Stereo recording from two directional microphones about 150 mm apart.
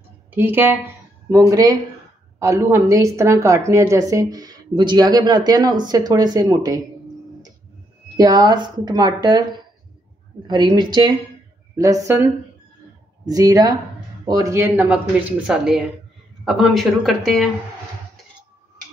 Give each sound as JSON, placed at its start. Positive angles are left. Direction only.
{"t": 0.3, "sound": "a woman's voice", "side_deg": -15}
{"t": 8.2, "sound": "a woman's voice", "side_deg": -25}
{"t": 13.3, "sound": "a woman's voice", "side_deg": -25}
{"t": 14.9, "sound": "speech", "side_deg": -5}